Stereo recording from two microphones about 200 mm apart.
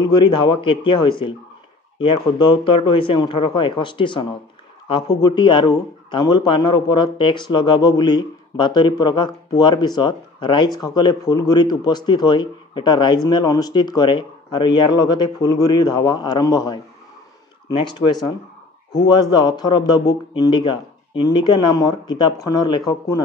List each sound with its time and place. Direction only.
0.0 s speech: 25° left (ahead or behind)
19.0 s speech: 20° left (ahead or behind)